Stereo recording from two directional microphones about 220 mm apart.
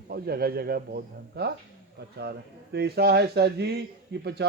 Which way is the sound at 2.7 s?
45° right (ahead or behind).